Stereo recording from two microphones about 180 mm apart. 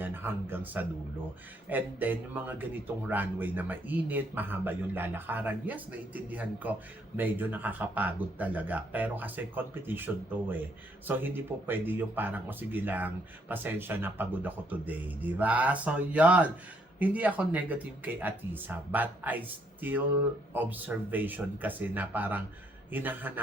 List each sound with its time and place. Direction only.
0.0 s speech: 10° right (ahead or behind)